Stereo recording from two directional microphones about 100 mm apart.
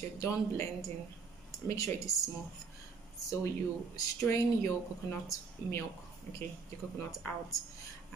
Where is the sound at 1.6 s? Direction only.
35° left (ahead or behind).